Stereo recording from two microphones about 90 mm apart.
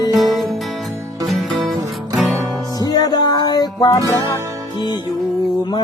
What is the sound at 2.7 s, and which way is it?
Music, 45° left (ahead or behind).